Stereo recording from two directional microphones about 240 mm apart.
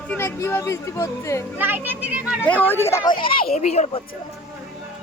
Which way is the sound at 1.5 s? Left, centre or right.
Centre.